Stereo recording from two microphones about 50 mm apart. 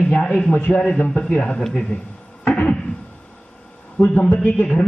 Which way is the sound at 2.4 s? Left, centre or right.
Left.